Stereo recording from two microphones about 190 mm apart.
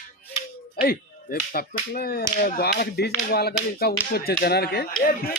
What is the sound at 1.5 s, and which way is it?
Speech, 55° left (ahead or behind).